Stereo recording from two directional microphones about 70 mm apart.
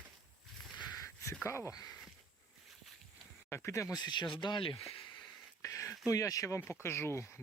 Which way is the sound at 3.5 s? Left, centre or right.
Left.